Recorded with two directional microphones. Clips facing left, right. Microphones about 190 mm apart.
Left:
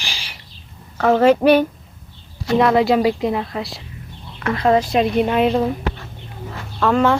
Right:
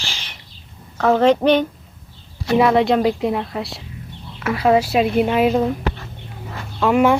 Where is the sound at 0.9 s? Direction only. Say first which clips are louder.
Left 1 dB; 5° left (ahead or behind).